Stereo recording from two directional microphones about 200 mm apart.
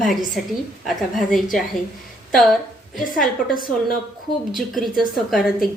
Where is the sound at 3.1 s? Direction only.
45° left (ahead or behind).